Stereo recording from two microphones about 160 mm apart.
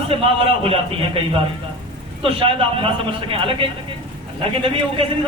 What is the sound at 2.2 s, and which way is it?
A man's voice, 35° right (ahead or behind).